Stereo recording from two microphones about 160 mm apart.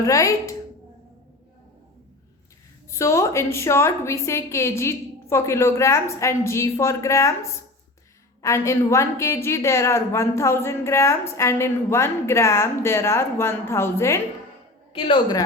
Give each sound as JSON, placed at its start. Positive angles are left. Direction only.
{"t": 0.0, "sound": "a woman's voice", "side_deg": 20}
{"t": 2.9, "sound": "a woman's voice", "side_deg": 20}
{"t": 14.9, "sound": "a woman's voice", "side_deg": 30}